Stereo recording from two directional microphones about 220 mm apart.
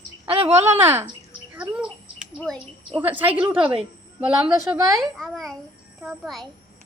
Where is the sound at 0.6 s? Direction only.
10° right (ahead or behind).